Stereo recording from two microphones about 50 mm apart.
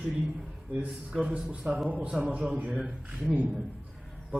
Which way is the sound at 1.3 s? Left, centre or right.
Right.